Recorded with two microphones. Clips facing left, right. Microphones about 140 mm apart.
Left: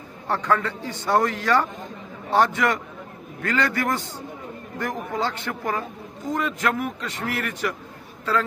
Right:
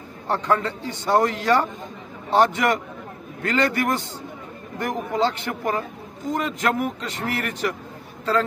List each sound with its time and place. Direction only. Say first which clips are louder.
0.3 s a man's voice: right 1 dB; 25° right (ahead or behind)